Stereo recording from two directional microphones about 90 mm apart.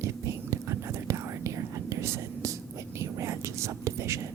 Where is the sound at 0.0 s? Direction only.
35° right (ahead or behind).